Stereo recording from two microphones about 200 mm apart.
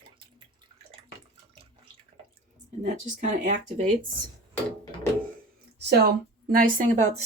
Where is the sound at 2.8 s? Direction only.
40° right (ahead or behind).